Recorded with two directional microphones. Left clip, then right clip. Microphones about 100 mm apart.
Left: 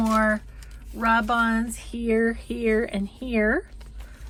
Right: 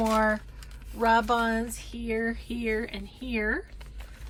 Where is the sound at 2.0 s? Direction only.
55° left (ahead or behind).